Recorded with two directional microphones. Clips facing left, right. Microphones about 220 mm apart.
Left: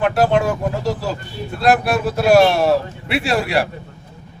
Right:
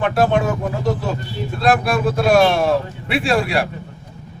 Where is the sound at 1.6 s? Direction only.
5° left (ahead or behind).